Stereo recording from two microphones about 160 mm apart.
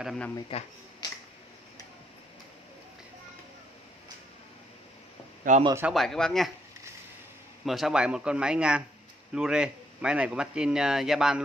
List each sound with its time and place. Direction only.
0.0 s a man's voice: centre (ahead or behind)
0.5 s speech: 35° left (ahead or behind)
1.0 s finger snapping: 25° left (ahead or behind)
5.5 s speech: 50° right (ahead or behind)
5.9 s a man's voice: 5° left (ahead or behind)
7.6 s a man's voice: centre (ahead or behind)